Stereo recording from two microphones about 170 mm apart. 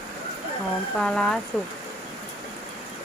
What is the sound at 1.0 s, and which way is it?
Speech, 5° left (ahead or behind).